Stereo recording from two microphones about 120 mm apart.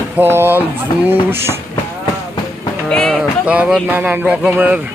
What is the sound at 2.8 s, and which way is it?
Speech, 5° left (ahead or behind).